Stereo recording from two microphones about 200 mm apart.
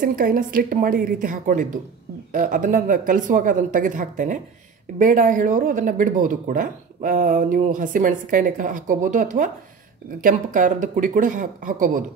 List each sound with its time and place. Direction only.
0.0 s a woman's voice: 45° right (ahead or behind)